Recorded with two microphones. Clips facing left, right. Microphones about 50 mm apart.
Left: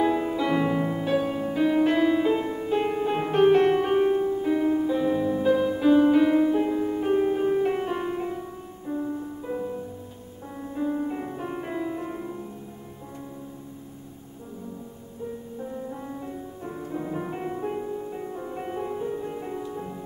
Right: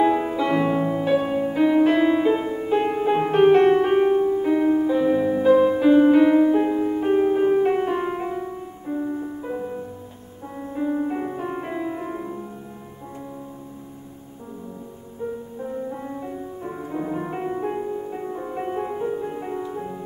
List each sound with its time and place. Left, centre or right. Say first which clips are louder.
0.0 s music: right 4 dB; centre
15.6 s music: right 5 dB; right